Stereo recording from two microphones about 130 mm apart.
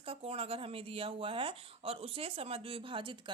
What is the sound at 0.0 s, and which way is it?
Speech, 45° right (ahead or behind).